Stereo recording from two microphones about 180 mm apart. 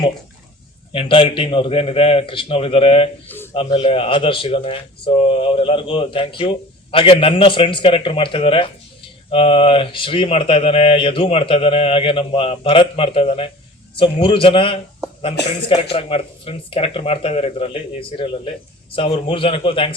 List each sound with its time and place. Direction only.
0.9 s speech: 30° left (ahead or behind)
3.2 s a sound: 10° left (ahead or behind)
3.5 s speech: 30° left (ahead or behind)